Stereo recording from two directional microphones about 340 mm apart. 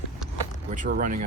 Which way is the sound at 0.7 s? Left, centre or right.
Right.